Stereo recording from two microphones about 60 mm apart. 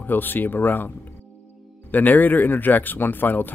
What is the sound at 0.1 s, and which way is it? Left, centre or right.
Speech, left.